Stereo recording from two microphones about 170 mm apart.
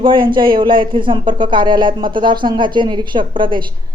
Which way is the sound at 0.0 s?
30° right (ahead or behind).